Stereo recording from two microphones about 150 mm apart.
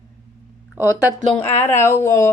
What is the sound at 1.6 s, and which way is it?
Speech, 15° left (ahead or behind).